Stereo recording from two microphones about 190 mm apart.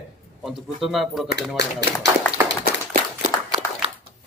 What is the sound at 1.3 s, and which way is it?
Speech, 65° left (ahead or behind).